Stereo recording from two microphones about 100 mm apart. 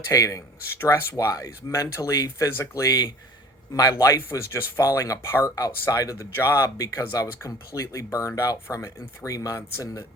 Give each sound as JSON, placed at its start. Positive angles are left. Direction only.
{"t": 0.1, "sound": "speech", "side_deg": 35}